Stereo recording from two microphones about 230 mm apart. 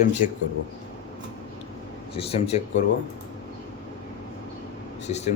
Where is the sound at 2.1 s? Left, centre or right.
Left.